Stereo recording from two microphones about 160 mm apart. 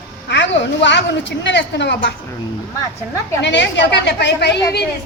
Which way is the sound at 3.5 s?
90° left.